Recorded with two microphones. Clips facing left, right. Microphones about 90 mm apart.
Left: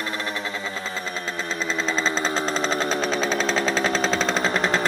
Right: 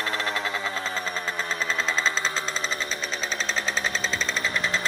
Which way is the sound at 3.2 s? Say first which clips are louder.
Left 7 dB; 90° left.